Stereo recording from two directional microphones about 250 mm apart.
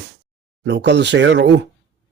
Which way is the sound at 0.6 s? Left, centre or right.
Right.